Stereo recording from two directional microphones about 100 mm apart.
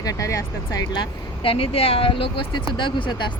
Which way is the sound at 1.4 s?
70° left (ahead or behind).